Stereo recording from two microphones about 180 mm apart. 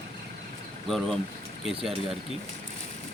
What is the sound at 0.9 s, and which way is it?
Speech, centre (ahead or behind).